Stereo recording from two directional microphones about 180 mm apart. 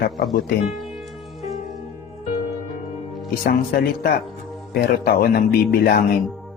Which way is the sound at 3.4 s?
50° left (ahead or behind).